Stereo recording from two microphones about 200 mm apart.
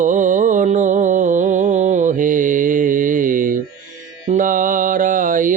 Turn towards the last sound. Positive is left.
turn(degrees=-40)  # may be behind; listen again after turning